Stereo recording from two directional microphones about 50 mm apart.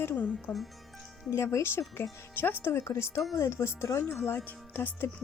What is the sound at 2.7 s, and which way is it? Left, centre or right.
Speech, left.